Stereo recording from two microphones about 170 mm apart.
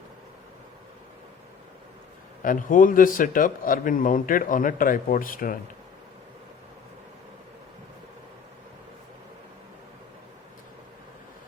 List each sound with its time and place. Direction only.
2.4 s a man's voice: 50° left (ahead or behind)